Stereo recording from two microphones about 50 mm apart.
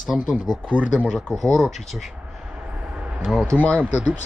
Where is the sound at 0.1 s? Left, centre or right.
Centre.